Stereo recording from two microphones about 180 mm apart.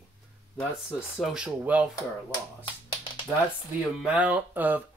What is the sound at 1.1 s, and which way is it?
Speech, 5° right (ahead or behind).